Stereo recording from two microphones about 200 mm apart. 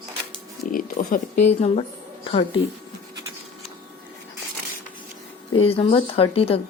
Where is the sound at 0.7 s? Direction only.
45° left (ahead or behind).